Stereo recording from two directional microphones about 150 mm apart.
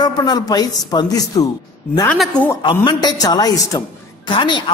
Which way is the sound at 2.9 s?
25° left (ahead or behind).